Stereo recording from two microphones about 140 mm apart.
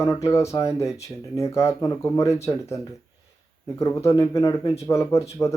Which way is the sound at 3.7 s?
20° left (ahead or behind).